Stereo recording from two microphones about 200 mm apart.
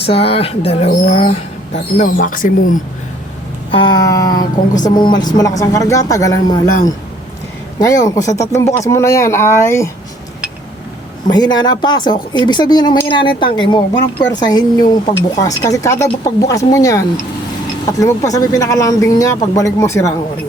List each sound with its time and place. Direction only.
0.0 s speech: 30° left (ahead or behind)
2.1 s speech: 45° left (ahead or behind)
3.7 s speech: 25° left (ahead or behind)
7.8 s speech: 15° left (ahead or behind)
11.3 s speech: 20° left (ahead or behind)